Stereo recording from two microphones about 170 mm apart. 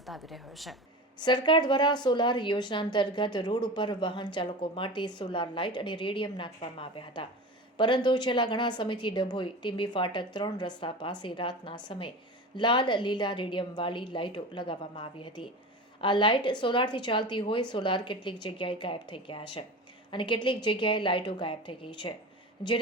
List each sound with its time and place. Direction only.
0.0 s a woman's voice: centre (ahead or behind)
1.2 s a woman's voice: 25° left (ahead or behind)